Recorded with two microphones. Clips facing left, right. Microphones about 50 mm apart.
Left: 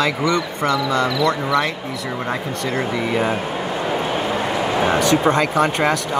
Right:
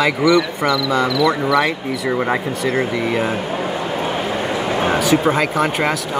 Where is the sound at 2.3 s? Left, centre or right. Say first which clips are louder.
Right 4 dB; right.